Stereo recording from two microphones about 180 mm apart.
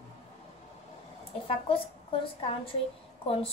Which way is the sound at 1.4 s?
30° left (ahead or behind).